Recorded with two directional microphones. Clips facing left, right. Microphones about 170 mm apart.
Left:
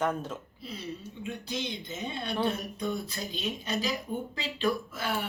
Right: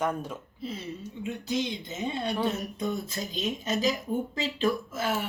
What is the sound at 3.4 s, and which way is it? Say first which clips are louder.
Speech: right 4 dB; 45° right (ahead or behind).